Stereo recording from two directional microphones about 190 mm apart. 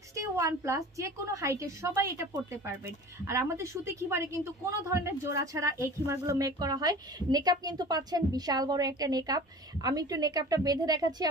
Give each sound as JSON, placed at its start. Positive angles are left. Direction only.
{"t": 0.1, "sound": "a woman's voice", "side_deg": -15}